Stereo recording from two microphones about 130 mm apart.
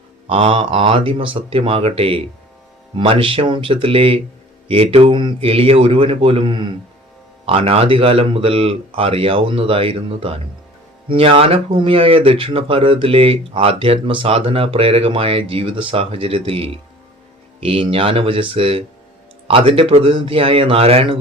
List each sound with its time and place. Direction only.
0.3 s speech: 45° right (ahead or behind)